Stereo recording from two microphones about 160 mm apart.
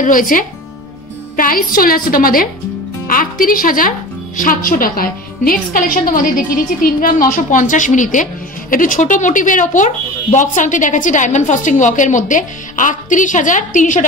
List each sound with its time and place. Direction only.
0.0 s a woman's voice: 60° left (ahead or behind)